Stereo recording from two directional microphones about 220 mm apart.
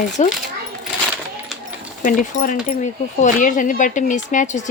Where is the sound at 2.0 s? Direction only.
35° left (ahead or behind).